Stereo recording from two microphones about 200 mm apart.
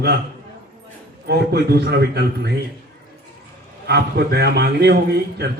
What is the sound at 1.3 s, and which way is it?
A man's voice, 55° right (ahead or behind).